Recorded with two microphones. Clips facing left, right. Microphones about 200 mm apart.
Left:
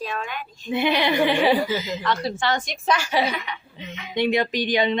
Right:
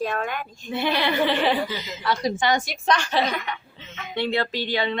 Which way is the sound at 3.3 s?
50° right (ahead or behind).